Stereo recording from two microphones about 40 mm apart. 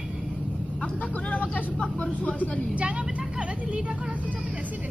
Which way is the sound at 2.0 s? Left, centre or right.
Left.